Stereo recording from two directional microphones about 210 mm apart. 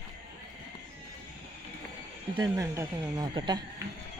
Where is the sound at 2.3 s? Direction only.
15° right (ahead or behind).